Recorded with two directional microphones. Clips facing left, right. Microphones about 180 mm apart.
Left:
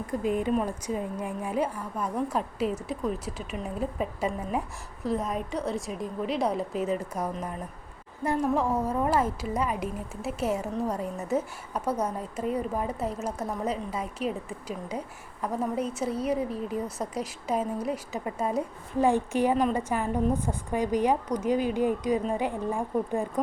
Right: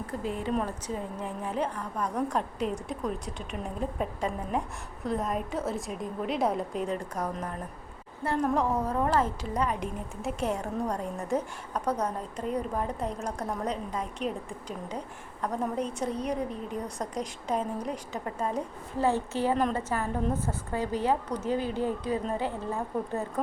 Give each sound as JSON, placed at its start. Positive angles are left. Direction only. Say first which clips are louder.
{"t": 0.1, "sound": "a woman's voice", "louder": "left 5 dB", "side_deg": 15}